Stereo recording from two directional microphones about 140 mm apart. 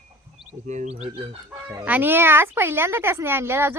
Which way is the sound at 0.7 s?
55° right (ahead or behind).